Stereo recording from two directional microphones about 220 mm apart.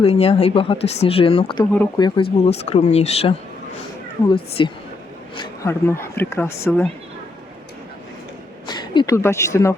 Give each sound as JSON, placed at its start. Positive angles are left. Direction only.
{"t": 0.0, "sound": "speech", "side_deg": 25}
{"t": 4.6, "sound": "speech", "side_deg": 20}
{"t": 8.6, "sound": "speech", "side_deg": 20}